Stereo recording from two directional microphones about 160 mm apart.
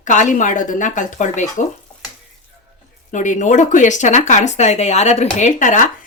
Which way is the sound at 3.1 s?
50° left (ahead or behind).